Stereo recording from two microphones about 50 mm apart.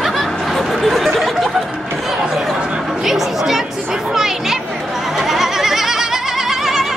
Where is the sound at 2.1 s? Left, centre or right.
Centre.